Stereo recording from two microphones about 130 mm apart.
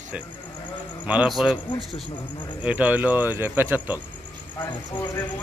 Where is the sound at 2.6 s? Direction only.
10° right (ahead or behind).